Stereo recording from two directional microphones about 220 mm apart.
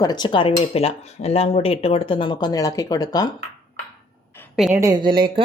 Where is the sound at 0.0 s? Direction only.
20° left (ahead or behind).